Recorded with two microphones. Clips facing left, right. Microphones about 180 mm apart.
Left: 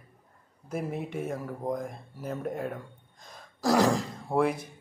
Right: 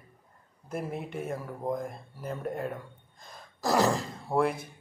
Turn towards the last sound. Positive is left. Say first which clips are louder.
# left 1 dB
turn(degrees=-5)  # may be behind; listen again after turning